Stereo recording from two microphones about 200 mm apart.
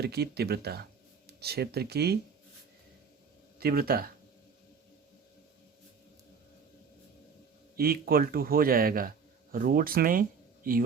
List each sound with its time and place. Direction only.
0.0 s speech: 55° right (ahead or behind)
3.6 s speech: 50° right (ahead or behind)
7.8 s a man's voice: 50° right (ahead or behind)